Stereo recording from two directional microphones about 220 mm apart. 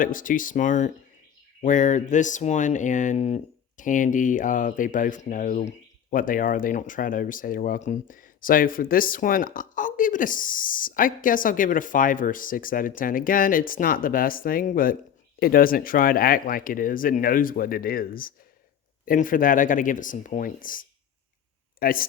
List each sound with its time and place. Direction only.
0.0 s speech: 35° left (ahead or behind)